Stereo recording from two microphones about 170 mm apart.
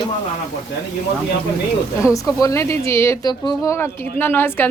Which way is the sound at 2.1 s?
20° left (ahead or behind).